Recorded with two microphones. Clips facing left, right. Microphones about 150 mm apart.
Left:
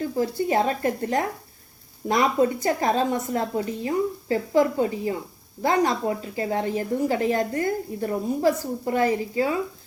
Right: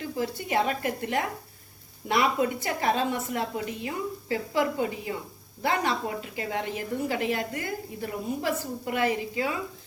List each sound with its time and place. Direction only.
0.0 s a woman's voice: 40° left (ahead or behind)